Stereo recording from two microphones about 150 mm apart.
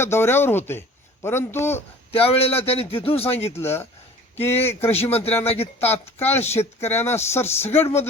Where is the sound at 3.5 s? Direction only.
15° left (ahead or behind).